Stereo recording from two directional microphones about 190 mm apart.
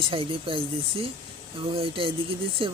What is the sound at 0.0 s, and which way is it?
Speech, 30° right (ahead or behind).